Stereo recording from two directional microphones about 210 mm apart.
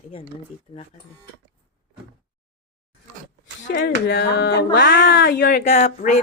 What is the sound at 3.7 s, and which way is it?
Speech, 45° left (ahead or behind).